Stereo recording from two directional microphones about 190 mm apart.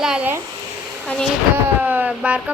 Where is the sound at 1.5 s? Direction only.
10° right (ahead or behind).